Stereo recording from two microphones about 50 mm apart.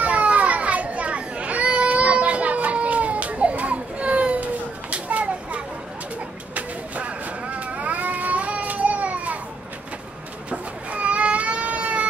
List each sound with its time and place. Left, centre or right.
0.0 s children playing: right
6.5 s vehicle: right
10.5 s baby cry: right